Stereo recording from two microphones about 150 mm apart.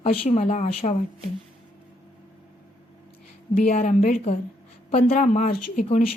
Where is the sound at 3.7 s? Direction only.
60° left (ahead or behind).